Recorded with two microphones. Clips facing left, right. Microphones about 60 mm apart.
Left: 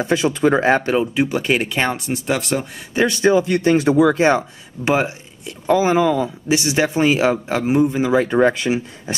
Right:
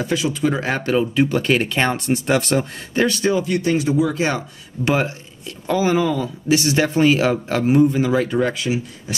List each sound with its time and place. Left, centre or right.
0.0 s speech: left; by 2.6 s centre
2.9 s speech: left
4.8 s speech: left